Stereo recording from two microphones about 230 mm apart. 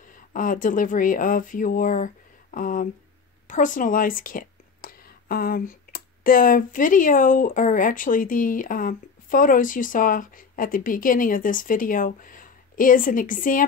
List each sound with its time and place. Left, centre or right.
0.1 s a woman's voice: left